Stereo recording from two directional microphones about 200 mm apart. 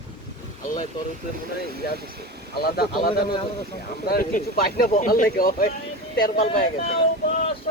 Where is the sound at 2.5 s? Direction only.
50° left (ahead or behind).